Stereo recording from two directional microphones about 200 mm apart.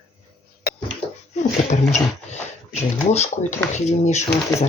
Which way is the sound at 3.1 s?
35° left (ahead or behind).